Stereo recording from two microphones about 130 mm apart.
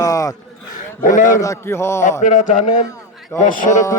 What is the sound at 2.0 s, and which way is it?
Music, 65° left (ahead or behind).